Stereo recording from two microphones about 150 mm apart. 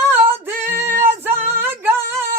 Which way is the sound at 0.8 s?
15° right (ahead or behind).